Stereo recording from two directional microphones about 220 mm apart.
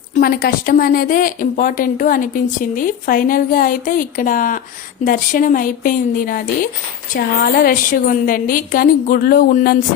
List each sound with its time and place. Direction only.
0.1 s a woman's voice: 40° left (ahead or behind)